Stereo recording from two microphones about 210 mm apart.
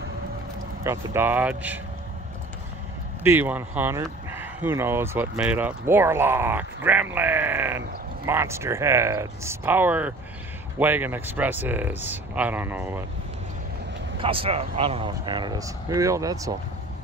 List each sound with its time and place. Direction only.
0.8 s speech: 10° right (ahead or behind)
3.3 s speech: 10° right (ahead or behind)
14.2 s speech: 25° right (ahead or behind)